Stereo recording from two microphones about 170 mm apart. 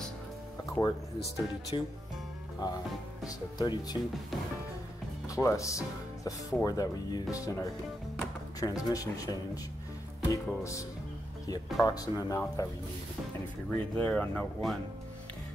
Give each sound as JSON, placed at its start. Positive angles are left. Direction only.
{"t": 0.7, "sound": "speech", "side_deg": 20}
{"t": 1.7, "sound": "speech", "side_deg": 30}
{"t": 5.3, "sound": "speech", "side_deg": 20}
{"t": 13.7, "sound": "speech", "side_deg": 10}